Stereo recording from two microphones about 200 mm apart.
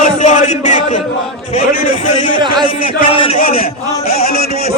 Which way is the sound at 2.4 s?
20° right (ahead or behind).